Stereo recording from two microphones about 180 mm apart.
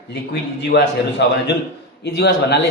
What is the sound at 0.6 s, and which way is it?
A man's voice, 70° left (ahead or behind).